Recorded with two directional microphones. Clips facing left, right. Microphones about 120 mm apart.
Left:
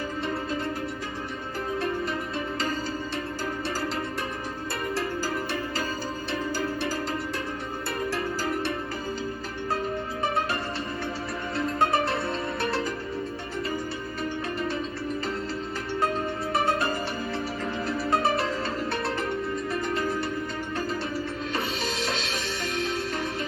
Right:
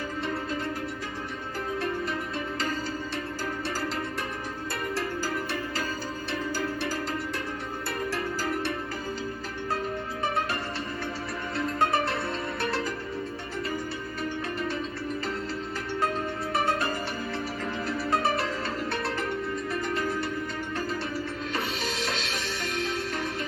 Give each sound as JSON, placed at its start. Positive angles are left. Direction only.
{"t": 4.7, "sound": "music", "side_deg": 25}
{"t": 7.9, "sound": "music", "side_deg": 25}
{"t": 11.5, "sound": "music", "side_deg": 25}
{"t": 16.5, "sound": "music", "side_deg": 25}
{"t": 21.5, "sound": "music", "side_deg": 25}